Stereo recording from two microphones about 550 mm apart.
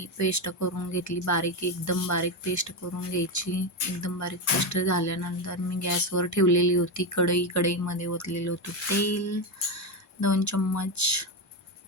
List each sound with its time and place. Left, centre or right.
0.0 s speech: left